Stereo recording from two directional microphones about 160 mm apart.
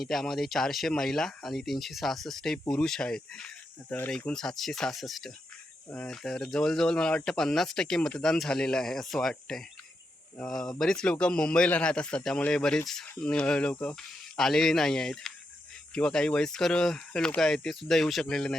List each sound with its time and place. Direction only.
0.0 s speech: centre (ahead or behind)